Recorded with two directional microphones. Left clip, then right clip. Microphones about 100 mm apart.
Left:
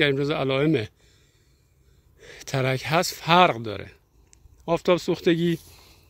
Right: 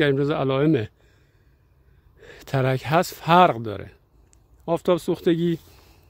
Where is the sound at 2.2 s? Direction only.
60° right (ahead or behind); by 5.5 s 40° right (ahead or behind).